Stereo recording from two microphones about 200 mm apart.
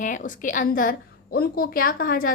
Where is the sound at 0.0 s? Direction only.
40° left (ahead or behind).